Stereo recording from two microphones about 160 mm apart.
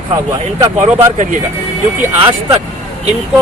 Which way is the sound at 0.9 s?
50° right (ahead or behind).